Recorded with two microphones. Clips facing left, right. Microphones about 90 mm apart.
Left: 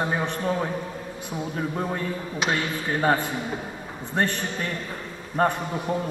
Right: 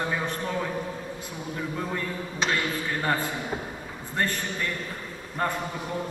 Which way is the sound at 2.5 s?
25° left (ahead or behind).